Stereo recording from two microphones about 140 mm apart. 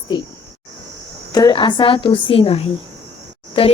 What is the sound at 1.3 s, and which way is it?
A woman's voice, 30° left (ahead or behind).